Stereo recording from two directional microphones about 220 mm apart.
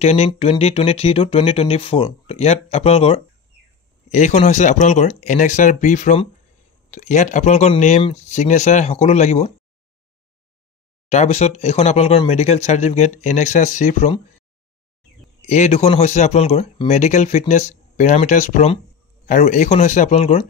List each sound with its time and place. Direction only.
0.0 s speech: 30° left (ahead or behind)
11.1 s speech: 30° left (ahead or behind)
15.4 s speech: 30° left (ahead or behind)